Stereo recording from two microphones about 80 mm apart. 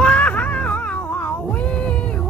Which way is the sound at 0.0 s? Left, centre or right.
Centre.